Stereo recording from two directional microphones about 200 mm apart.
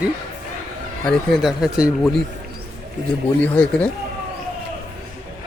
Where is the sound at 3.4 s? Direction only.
10° left (ahead or behind).